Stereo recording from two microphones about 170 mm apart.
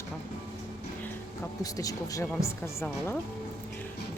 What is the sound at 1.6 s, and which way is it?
Speech, 20° left (ahead or behind).